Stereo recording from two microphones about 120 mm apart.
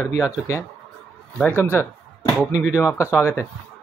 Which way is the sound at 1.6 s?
20° left (ahead or behind).